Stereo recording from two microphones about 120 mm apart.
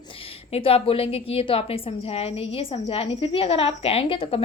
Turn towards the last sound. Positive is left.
turn(degrees=50)  # may be behind; listen again after turning